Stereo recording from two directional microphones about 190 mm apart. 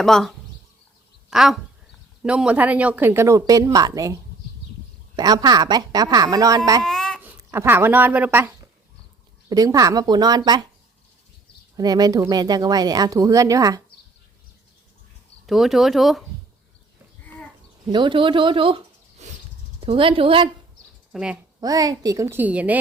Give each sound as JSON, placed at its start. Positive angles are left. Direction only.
{"t": 0.0, "sound": "speech", "side_deg": 0}
{"t": 6.8, "sound": "babbling", "side_deg": 5}
{"t": 7.2, "sound": "speech", "side_deg": -10}
{"t": 9.5, "sound": "speech", "side_deg": -20}
{"t": 11.8, "sound": "speech", "side_deg": -20}
{"t": 15.4, "sound": "speech", "side_deg": 0}
{"t": 17.8, "sound": "speech", "side_deg": -25}
{"t": 19.2, "sound": "a sound", "side_deg": -40}
{"t": 19.8, "sound": "speech", "side_deg": -30}
{"t": 21.1, "sound": "speech", "side_deg": -5}
{"t": 21.6, "sound": "speech", "side_deg": -20}